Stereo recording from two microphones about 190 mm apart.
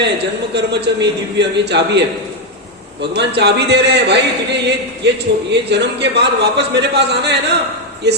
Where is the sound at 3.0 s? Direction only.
65° right (ahead or behind).